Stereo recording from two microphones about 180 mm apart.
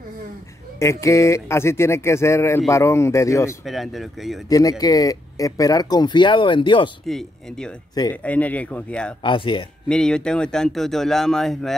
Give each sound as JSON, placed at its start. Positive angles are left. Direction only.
{"t": 0.7, "sound": "speech", "side_deg": 15}
{"t": 3.6, "sound": "speech", "side_deg": 0}
{"t": 4.5, "sound": "speech", "side_deg": 20}
{"t": 7.1, "sound": "speech", "side_deg": 0}
{"t": 9.2, "sound": "speech", "side_deg": 25}
{"t": 9.8, "sound": "speech", "side_deg": 5}